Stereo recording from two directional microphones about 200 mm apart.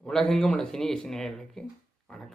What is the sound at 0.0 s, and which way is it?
Speech, 5° left (ahead or behind).